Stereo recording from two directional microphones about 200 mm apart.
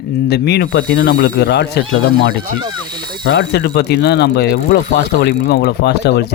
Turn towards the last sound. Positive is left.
turn(degrees=55)  # may be behind; listen again after turning